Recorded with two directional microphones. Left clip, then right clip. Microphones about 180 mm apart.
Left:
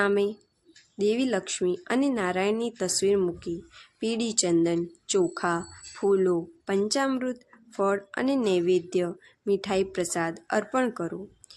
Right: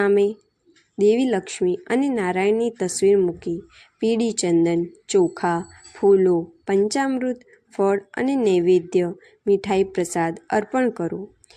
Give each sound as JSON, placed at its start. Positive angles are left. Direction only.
{"t": 0.0, "sound": "a woman's voice", "side_deg": -20}